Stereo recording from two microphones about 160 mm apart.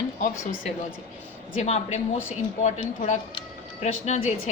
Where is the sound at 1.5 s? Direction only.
45° left (ahead or behind).